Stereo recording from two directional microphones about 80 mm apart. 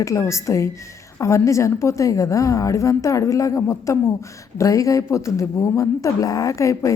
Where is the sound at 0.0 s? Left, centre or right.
Left.